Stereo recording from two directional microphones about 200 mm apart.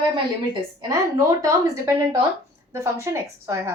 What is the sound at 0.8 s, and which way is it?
A woman's voice, 15° right (ahead or behind).